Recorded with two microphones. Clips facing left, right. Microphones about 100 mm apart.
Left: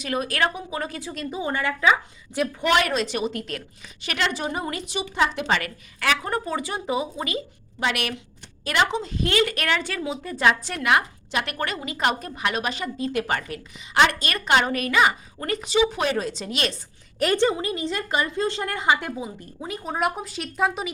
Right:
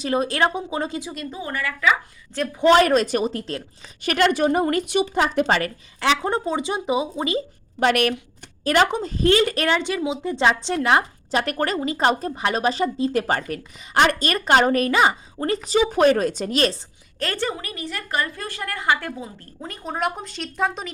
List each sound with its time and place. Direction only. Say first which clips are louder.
0.0 s speech: right 4 dB; 30° right (ahead or behind)
1.3 s a woman's voice: left 4 dB; 20° left (ahead or behind)
2.6 s a woman's voice: right 8 dB; 30° right (ahead or behind)
4.0 s a woman's voice: right 8 dB; 50° right (ahead or behind)
6.0 s speech: right 4 dB; 25° right (ahead or behind)
7.8 s a woman's voice: right 7 dB; 45° right (ahead or behind)
17.2 s a woman's voice: left 5 dB; 15° left (ahead or behind)
19.6 s speech: even; 5° left (ahead or behind)